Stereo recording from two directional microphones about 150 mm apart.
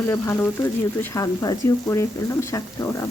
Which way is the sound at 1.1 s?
25° left (ahead or behind).